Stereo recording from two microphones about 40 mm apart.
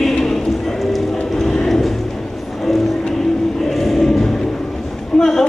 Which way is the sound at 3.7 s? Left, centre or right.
Centre.